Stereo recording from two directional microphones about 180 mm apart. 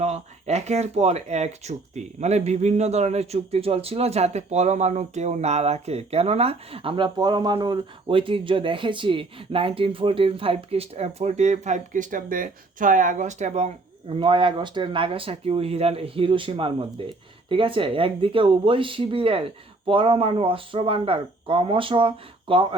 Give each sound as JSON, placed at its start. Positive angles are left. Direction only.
{"t": 0.0, "sound": "speech", "side_deg": -35}
{"t": 14.1, "sound": "speech", "side_deg": -30}